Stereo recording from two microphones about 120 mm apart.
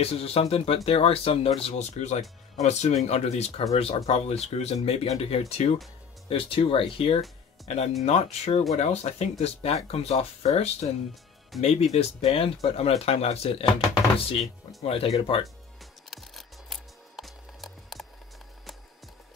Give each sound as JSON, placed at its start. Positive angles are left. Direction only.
{"t": 0.0, "sound": "speech", "side_deg": 55}
{"t": 1.6, "sound": "speech", "side_deg": 65}
{"t": 6.2, "sound": "speech", "side_deg": 50}
{"t": 7.6, "sound": "speech", "side_deg": 65}
{"t": 14.8, "sound": "speech", "side_deg": 55}
{"t": 16.1, "sound": "music", "side_deg": 0}